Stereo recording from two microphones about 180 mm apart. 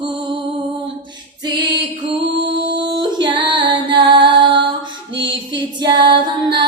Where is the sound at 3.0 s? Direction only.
25° right (ahead or behind).